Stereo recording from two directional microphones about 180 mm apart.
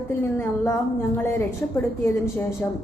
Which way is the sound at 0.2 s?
15° left (ahead or behind).